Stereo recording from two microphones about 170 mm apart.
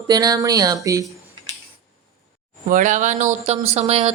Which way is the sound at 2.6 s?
50° right (ahead or behind).